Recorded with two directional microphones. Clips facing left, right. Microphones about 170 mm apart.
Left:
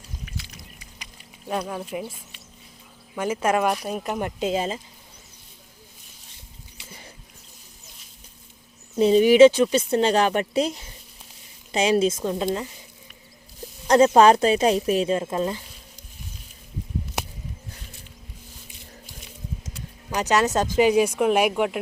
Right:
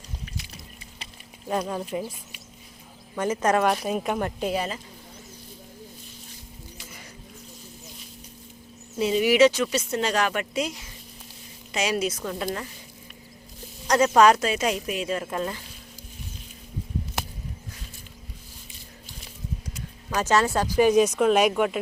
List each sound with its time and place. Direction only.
1.5 s speech: centre (ahead or behind)
3.2 s speech: 10° left (ahead or behind)
4.2 s speech: 20° left (ahead or behind)
9.0 s speech: 30° left (ahead or behind)
13.8 s speech: 25° left (ahead or behind)
20.1 s speech: 15° left (ahead or behind)